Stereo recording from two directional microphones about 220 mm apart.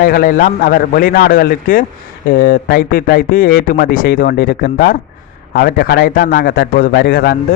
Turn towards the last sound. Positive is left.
turn(degrees=45)  # may be behind; listen again after turning